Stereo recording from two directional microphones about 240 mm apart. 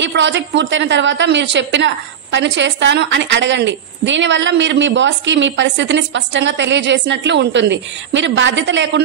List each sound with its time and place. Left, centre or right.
0.0 s a woman's voice: right